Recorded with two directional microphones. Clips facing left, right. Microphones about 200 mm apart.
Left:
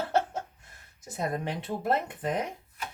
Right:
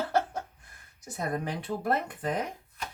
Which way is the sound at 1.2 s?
25° left (ahead or behind).